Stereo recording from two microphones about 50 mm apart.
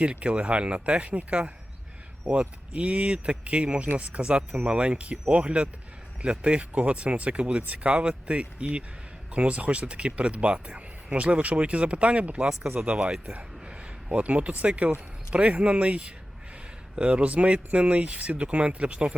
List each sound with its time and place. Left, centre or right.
0.0 s speech: right